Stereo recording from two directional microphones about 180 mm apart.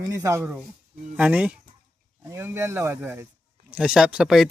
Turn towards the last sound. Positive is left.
turn(degrees=0)  # may be behind; listen again after turning